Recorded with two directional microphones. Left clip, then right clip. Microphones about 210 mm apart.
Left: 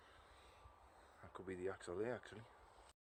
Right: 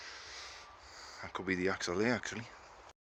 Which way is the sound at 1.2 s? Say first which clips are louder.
Right 13 dB; centre (ahead or behind).